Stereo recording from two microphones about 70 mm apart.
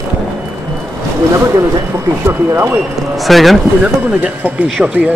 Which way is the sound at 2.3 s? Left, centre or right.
Right.